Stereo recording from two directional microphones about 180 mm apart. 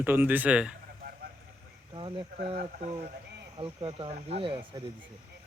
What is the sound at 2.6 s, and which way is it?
Speech, 45° right (ahead or behind).